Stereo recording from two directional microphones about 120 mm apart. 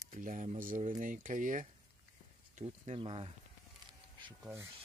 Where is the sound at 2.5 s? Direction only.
60° right (ahead or behind).